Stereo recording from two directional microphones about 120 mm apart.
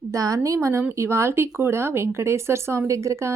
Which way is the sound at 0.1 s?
25° right (ahead or behind).